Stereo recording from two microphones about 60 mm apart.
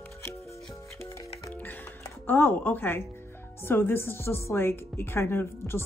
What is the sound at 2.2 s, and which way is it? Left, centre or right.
Speech, left.